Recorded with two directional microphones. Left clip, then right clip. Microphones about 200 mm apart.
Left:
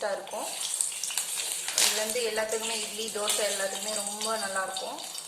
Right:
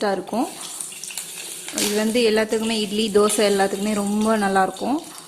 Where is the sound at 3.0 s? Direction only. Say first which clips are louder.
Right 13 dB; 55° right (ahead or behind).